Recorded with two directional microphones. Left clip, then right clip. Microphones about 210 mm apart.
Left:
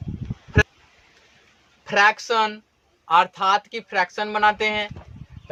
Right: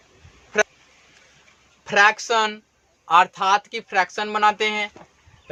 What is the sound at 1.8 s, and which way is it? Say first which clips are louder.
Speech: right 1 dB; 15° right (ahead or behind).